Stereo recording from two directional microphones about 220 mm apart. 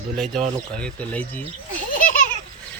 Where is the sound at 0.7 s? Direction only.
5° left (ahead or behind).